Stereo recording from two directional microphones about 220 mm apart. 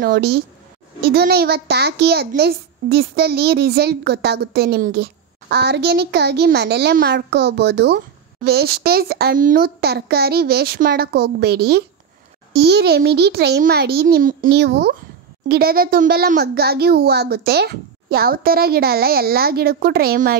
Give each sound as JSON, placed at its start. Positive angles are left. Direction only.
{"t": 0.0, "sound": "a child's voice", "side_deg": -45}